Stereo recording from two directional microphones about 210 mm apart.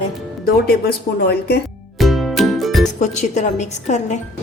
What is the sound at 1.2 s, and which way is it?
Speech, 50° left (ahead or behind).